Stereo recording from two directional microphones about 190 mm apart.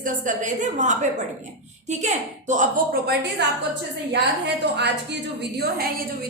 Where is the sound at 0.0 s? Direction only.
40° right (ahead or behind).